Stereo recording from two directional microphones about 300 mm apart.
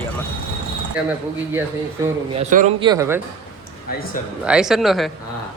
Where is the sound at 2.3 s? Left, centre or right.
Right.